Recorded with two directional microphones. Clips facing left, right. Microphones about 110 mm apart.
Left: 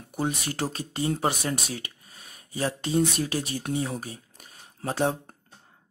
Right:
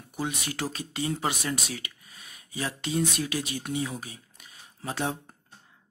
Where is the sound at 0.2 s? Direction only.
40° left (ahead or behind).